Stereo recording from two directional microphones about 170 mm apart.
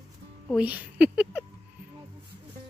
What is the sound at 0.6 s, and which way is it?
Speech, 10° right (ahead or behind).